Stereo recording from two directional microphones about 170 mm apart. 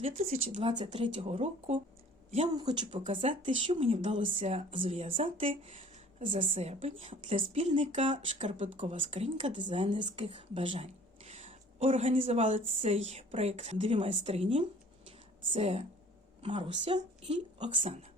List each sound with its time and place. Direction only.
0.0 s speech: 40° right (ahead or behind)
0.7 s speech: 25° right (ahead or behind)
2.5 s speech: 25° right (ahead or behind); by 8.9 s 45° right (ahead or behind)
8.9 s a woman's voice: 35° right (ahead or behind)